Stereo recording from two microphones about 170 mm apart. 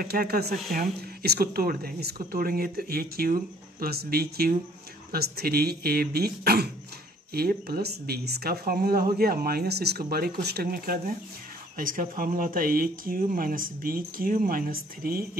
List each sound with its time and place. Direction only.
0.0 s speech: 60° right (ahead or behind)